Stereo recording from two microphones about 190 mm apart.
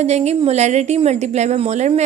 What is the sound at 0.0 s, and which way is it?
A woman's voice, 35° right (ahead or behind).